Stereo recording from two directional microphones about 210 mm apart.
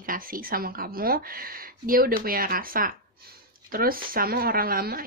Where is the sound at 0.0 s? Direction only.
40° right (ahead or behind).